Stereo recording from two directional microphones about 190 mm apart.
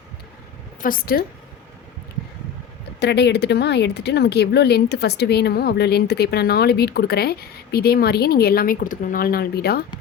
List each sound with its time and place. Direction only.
0.8 s a woman's voice: 50° left (ahead or behind)
3.0 s speech: 65° left (ahead or behind)